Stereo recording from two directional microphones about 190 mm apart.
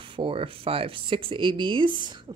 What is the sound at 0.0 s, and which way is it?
Speech, 25° right (ahead or behind).